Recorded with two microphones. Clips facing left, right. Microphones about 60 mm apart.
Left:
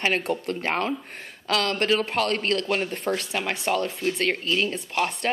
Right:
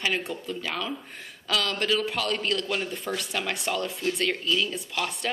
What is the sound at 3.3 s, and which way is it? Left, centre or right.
Speech, left.